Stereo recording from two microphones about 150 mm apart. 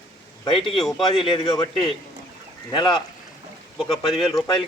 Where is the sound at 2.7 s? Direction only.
30° left (ahead or behind).